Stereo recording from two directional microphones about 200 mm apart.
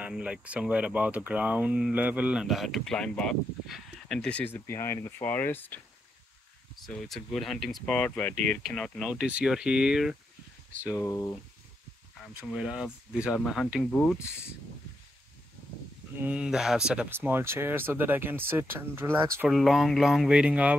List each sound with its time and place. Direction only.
0.0 s speech: 5° right (ahead or behind); by 5.8 s 10° left (ahead or behind)
6.9 s speech: centre (ahead or behind)
10.8 s speech: 15° left (ahead or behind)
12.4 s speech: centre (ahead or behind)
16.2 s speech: 5° right (ahead or behind)
19.5 s speech: centre (ahead or behind)